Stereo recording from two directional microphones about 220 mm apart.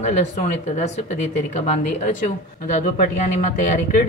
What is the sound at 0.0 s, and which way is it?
Speech, 30° left (ahead or behind).